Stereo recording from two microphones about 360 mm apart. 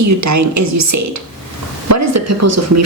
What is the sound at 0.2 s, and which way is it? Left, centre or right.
A woman's voice, right.